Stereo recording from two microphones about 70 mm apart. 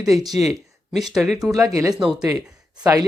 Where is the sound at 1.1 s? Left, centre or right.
Centre.